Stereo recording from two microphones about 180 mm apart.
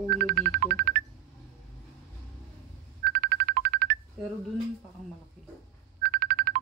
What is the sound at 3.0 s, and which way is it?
Music, 60° right (ahead or behind).